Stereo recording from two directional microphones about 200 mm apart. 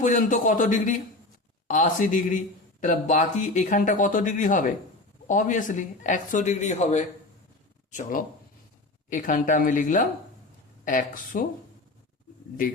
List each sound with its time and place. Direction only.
0.0 s speech: 40° left (ahead or behind)
11.1 s speech: 40° left (ahead or behind)